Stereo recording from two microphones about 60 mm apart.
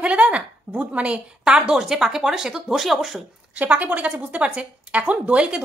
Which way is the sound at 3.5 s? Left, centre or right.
Right.